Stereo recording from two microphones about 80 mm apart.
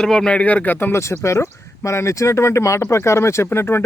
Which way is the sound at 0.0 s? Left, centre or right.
Centre.